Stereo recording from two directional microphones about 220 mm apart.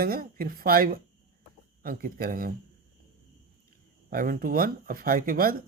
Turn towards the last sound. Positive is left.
turn(degrees=-40)  # may be behind; listen again after turning